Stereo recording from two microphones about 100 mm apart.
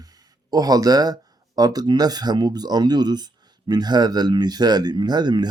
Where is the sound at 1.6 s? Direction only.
40° right (ahead or behind).